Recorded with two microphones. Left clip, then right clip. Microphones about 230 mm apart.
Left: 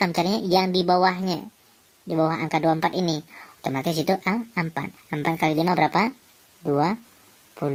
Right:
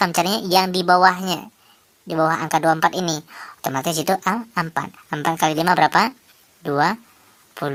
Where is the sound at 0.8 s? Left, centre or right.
Right.